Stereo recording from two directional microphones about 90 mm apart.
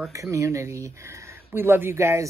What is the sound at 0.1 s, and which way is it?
Speech, 35° right (ahead or behind).